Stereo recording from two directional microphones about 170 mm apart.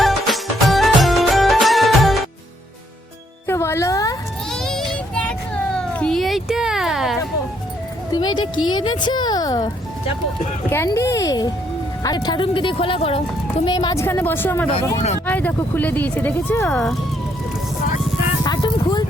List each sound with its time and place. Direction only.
0.0 s music: centre (ahead or behind)
3.4 s music: 15° left (ahead or behind)
4.5 s child singing: centre (ahead or behind)
5.7 s cat: 5° left (ahead or behind)
8.1 s speech: 25° left (ahead or behind)
10.8 s speech: 15° left (ahead or behind); by 13.2 s 35° left (ahead or behind)
13.7 s speech: 25° left (ahead or behind)
14.0 s speech: 15° left (ahead or behind)
18.4 s music: 25° left (ahead or behind)